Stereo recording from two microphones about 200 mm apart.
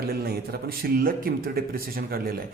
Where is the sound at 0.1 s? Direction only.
50° right (ahead or behind).